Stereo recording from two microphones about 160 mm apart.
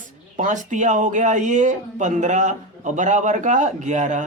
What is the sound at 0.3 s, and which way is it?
Speech, 50° right (ahead or behind).